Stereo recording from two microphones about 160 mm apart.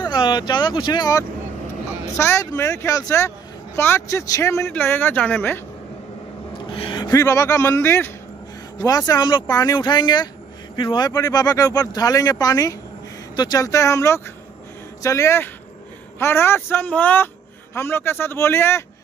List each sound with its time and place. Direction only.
0.0 s speech: 25° left (ahead or behind); by 5.6 s 10° left (ahead or behind)
6.7 s speech: 30° left (ahead or behind); by 18.9 s 15° left (ahead or behind)